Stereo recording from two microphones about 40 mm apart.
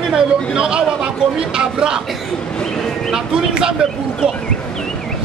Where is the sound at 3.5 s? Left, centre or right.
Right.